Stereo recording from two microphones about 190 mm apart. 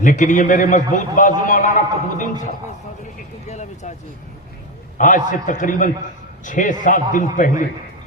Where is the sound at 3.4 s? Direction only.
35° left (ahead or behind).